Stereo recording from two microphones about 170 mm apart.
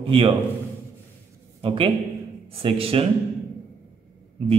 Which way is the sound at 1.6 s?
30° right (ahead or behind).